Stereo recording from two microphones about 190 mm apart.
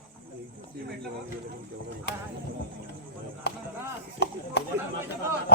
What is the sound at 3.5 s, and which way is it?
Chop, 60° left (ahead or behind).